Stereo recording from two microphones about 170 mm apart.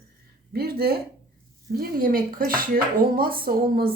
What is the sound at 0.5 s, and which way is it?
Speech, 65° right (ahead or behind).